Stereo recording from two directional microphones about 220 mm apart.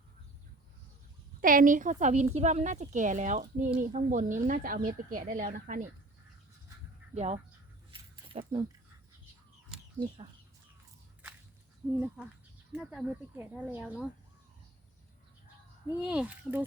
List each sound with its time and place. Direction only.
1.4 s speech: 40° right (ahead or behind)
7.1 s speech: 30° right (ahead or behind)
7.9 s keys jangling: 25° right (ahead or behind)
11.9 s speech: 10° right (ahead or behind)
16.0 s speech: 5° right (ahead or behind)